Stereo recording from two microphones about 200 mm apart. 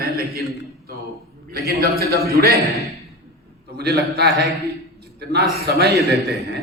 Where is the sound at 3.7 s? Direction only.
55° right (ahead or behind).